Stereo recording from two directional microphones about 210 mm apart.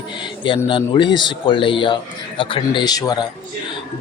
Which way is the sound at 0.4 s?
25° left (ahead or behind).